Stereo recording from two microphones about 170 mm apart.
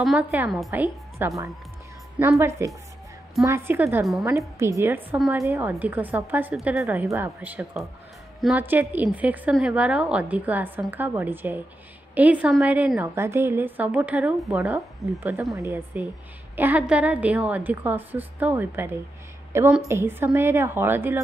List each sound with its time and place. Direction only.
0.0 s a woman's voice: 5° right (ahead or behind)
15.5 s a woman's voice: 15° right (ahead or behind)